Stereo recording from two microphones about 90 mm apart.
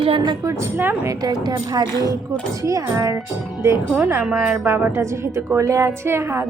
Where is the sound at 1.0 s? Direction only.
45° right (ahead or behind).